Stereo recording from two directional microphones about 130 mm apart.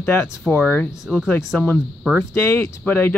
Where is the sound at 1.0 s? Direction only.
5° left (ahead or behind).